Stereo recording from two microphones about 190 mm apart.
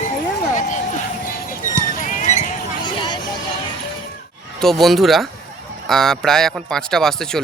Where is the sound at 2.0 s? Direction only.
40° left (ahead or behind).